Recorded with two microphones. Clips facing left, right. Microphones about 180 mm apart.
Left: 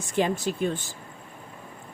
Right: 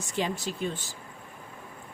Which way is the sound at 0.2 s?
55° left (ahead or behind).